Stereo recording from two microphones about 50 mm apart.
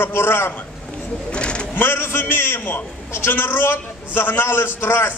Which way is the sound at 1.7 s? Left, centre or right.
Left.